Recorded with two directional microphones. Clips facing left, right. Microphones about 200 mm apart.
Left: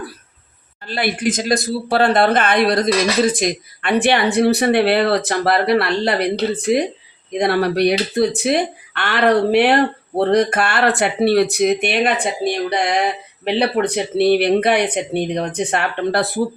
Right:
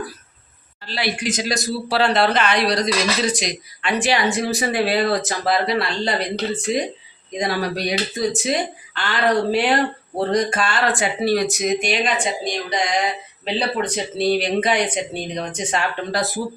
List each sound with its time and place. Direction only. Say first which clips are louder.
0.9 s speech: left 4 dB; 50° left (ahead or behind)